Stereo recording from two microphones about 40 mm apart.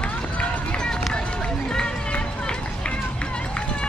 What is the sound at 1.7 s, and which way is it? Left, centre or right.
Run, left.